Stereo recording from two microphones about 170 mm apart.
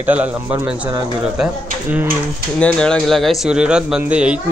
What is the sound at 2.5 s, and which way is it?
A man's voice, 5° left (ahead or behind).